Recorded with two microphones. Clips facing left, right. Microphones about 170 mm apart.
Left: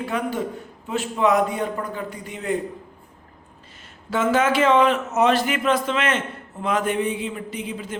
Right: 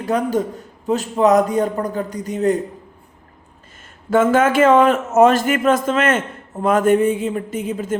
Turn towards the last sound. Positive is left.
turn(degrees=-45)  # may be behind; listen again after turning